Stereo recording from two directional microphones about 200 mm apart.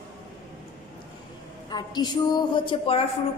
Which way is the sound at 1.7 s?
20° left (ahead or behind).